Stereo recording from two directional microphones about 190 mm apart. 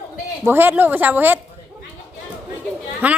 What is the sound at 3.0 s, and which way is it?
Speech, 10° right (ahead or behind).